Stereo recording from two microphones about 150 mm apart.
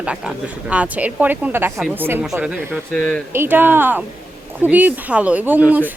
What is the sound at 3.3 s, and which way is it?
Speech, 15° right (ahead or behind).